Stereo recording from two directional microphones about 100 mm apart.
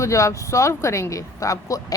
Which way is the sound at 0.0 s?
30° left (ahead or behind).